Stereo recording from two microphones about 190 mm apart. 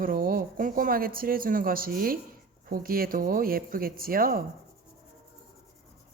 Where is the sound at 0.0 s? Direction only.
50° right (ahead or behind).